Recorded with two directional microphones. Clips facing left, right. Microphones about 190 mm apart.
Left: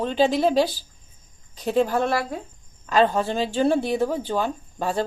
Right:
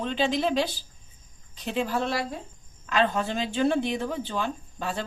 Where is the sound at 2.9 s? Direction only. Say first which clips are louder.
Left 5 dB; 35° left (ahead or behind).